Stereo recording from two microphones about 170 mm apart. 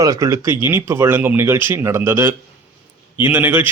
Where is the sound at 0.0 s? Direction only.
20° right (ahead or behind).